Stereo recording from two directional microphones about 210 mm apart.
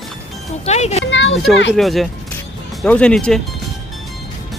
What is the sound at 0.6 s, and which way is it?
Speech, 30° left (ahead or behind).